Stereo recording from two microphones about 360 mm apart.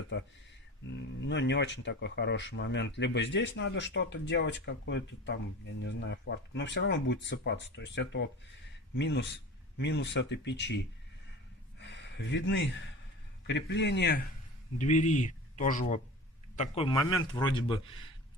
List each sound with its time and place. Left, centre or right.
0.1 s speech: left
11.8 s a sound: left
13.5 s a man's voice: left; by 18.0 s centre